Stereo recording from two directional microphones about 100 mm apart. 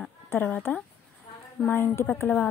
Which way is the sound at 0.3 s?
20° left (ahead or behind).